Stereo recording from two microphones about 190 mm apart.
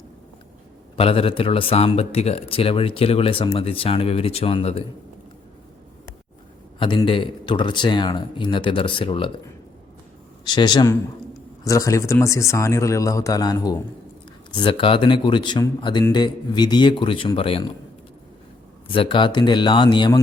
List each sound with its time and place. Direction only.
0.9 s speech: 30° left (ahead or behind)
6.7 s speech: 25° left (ahead or behind)
10.4 s speech: 25° left (ahead or behind)
18.9 s speech: 25° left (ahead or behind)